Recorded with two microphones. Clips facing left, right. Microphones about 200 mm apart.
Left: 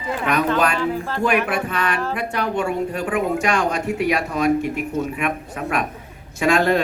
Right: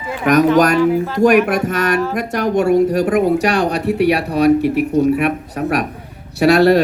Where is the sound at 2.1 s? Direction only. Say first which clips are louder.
Right 6 dB; 40° right (ahead or behind).